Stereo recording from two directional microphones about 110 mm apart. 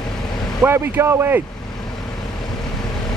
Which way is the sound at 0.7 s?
20° right (ahead or behind).